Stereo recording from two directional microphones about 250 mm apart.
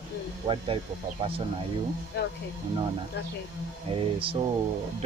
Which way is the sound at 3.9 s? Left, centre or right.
Right.